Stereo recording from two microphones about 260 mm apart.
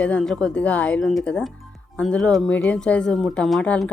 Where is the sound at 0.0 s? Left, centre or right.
Centre.